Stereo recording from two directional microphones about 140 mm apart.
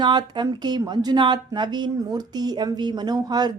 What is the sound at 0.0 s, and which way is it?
Speech, 30° right (ahead or behind).